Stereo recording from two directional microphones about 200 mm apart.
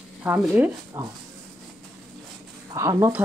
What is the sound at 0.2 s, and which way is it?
Speech, 10° right (ahead or behind).